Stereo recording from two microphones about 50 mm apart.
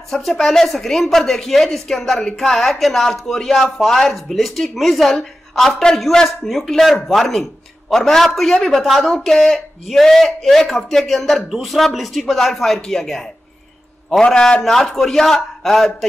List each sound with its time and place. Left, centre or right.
0.1 s a man's voice: centre
9.1 s a man's voice: centre